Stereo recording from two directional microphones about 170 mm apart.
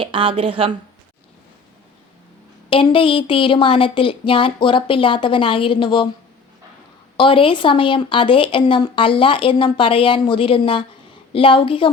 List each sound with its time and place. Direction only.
0.0 s a woman's voice: 30° right (ahead or behind)
2.6 s speech: 30° left (ahead or behind)
7.2 s a woman's voice: 30° left (ahead or behind)